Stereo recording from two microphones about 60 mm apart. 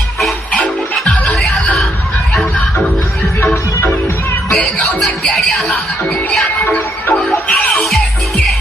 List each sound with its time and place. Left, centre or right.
0.6 s music: centre
5.0 s music: centre
6.4 s music: left